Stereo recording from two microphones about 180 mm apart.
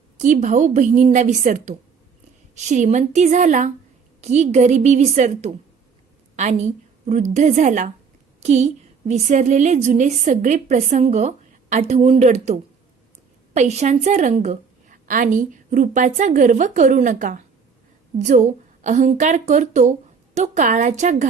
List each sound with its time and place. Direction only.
0.2 s a woman's voice: 45° right (ahead or behind)